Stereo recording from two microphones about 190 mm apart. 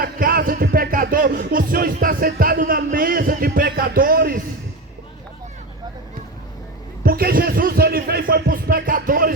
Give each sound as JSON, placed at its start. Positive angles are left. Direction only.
{"t": 0.0, "sound": "music", "side_deg": -50}
{"t": 7.0, "sound": "speech", "side_deg": -50}